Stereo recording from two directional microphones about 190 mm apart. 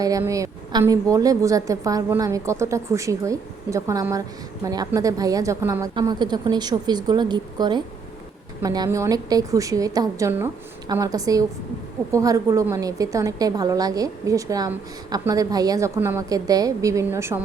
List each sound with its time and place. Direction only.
0.0 s a woman's voice: 20° right (ahead or behind)